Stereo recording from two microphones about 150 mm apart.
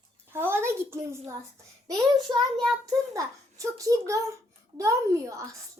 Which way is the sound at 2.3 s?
25° right (ahead or behind).